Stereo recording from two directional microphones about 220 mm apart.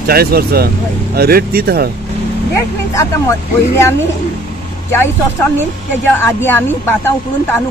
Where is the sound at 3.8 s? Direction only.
10° left (ahead or behind).